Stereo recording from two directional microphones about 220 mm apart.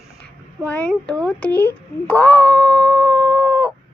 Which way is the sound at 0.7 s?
5° left (ahead or behind).